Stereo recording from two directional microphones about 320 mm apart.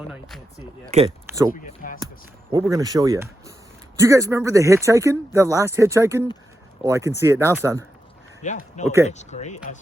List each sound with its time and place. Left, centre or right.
0.1 s speech: centre
2.5 s speech: centre
8.4 s speech: left